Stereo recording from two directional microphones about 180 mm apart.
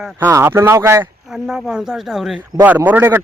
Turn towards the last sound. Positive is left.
turn(degrees=-10)  # may be behind; listen again after turning